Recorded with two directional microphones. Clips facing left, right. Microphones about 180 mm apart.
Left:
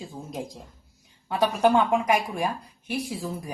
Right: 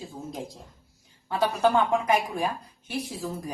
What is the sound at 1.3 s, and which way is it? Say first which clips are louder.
A woman's voice: left 2 dB; 15° left (ahead or behind).